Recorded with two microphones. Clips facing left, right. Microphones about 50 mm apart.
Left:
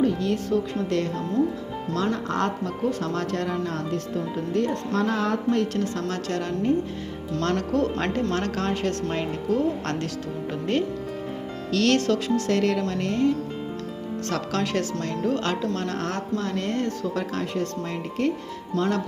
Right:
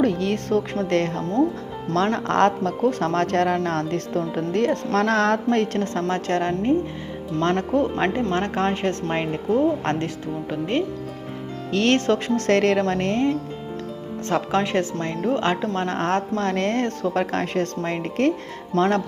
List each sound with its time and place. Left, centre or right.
0.0 s speech: right
7.3 s speech: right
11.7 s speech: right
12.5 s speech: right
14.3 s speech: right